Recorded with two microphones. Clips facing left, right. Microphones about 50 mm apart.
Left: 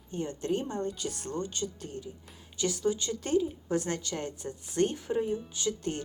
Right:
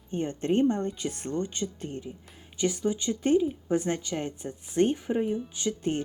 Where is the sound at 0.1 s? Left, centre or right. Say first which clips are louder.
Right 4 dB; right.